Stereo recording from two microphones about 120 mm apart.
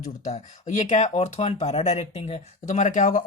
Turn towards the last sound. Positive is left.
turn(degrees=90)